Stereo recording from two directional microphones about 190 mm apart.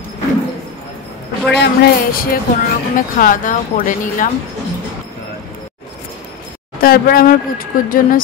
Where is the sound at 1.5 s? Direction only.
60° left (ahead or behind).